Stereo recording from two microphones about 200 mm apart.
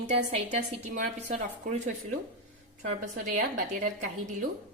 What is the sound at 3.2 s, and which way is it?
A woman's voice, 40° right (ahead or behind).